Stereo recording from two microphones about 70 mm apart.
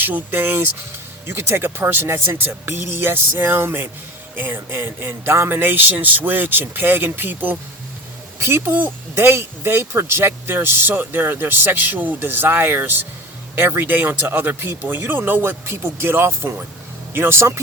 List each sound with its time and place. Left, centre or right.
0.0 s speech: right